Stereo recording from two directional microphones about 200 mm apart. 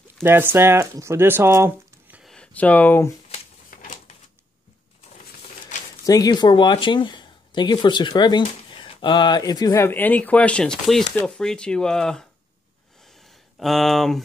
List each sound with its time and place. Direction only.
0.2 s speech: 10° right (ahead or behind)
2.3 s speech: 5° left (ahead or behind)
3.7 s a sound: 45° left (ahead or behind)
6.0 s speech: 20° left (ahead or behind); by 14.2 s centre (ahead or behind)